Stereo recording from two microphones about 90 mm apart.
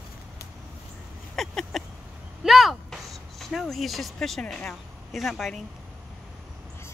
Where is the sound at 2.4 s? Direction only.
Centre (ahead or behind).